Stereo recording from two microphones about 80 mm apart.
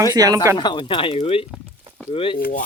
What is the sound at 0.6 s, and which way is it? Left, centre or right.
Speech, left.